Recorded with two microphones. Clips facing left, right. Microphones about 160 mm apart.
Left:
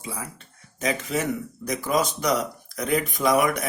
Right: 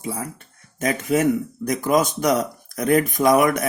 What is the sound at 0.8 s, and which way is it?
Speech, 50° right (ahead or behind).